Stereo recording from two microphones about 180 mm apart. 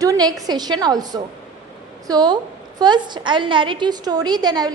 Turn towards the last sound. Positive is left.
turn(degrees=-20)  # may be behind; listen again after turning